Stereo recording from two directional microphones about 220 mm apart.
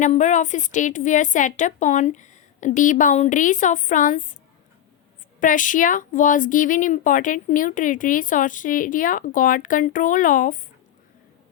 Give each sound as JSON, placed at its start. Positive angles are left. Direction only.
{"t": 0.0, "sound": "speech", "side_deg": 35}
{"t": 5.4, "sound": "speech", "side_deg": 35}